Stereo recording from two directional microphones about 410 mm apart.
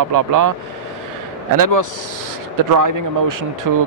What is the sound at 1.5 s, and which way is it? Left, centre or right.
Speech, right.